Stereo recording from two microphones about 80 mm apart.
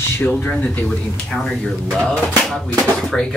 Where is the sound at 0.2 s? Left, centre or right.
Left.